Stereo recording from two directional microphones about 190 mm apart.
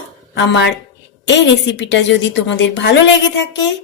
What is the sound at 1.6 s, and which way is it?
A woman's voice, 70° left (ahead or behind).